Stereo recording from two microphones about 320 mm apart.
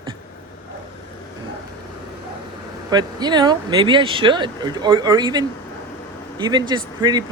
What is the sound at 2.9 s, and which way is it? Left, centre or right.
Speech, centre.